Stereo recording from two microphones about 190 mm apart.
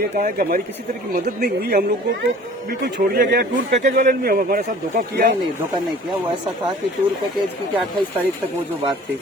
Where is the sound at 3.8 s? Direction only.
40° right (ahead or behind).